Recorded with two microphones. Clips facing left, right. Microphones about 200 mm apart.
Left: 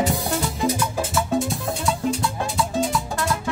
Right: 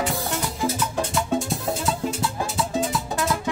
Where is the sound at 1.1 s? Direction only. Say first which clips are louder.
Left 2 dB; centre (ahead or behind).